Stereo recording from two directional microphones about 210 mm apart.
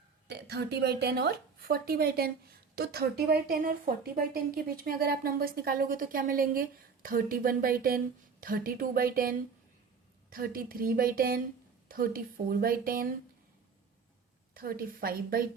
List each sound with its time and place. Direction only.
0.3 s a woman's voice: 50° right (ahead or behind)
14.5 s a woman's voice: 45° right (ahead or behind)